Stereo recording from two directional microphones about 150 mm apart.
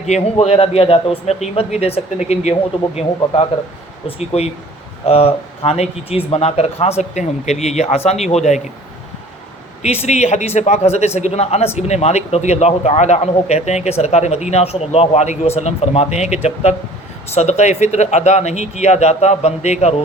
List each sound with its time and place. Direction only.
0.0 s speech: 45° left (ahead or behind)
9.8 s speech: 45° left (ahead or behind)